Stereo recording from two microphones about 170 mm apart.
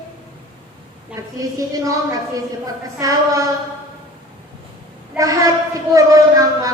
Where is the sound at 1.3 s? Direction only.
20° right (ahead or behind).